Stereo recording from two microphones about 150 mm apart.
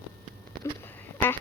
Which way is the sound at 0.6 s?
15° left (ahead or behind).